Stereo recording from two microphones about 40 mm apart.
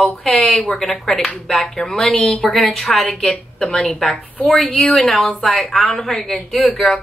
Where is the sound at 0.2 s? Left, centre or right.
Centre.